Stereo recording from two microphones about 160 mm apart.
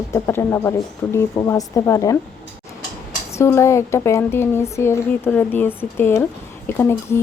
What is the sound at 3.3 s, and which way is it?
Speech, 15° left (ahead or behind).